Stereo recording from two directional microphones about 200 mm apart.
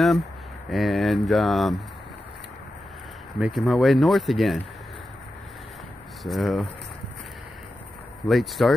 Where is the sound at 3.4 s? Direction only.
Centre (ahead or behind).